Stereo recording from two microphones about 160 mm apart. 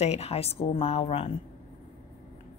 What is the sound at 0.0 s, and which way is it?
A woman's voice, 40° left (ahead or behind).